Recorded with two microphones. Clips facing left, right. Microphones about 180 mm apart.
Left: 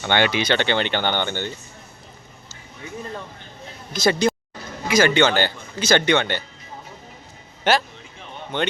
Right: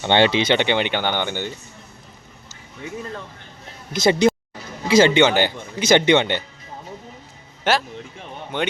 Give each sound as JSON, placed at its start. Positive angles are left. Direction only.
{"t": 0.0, "sound": "speech", "side_deg": -25}
{"t": 3.9, "sound": "speech", "side_deg": -20}
{"t": 7.6, "sound": "speech", "side_deg": 0}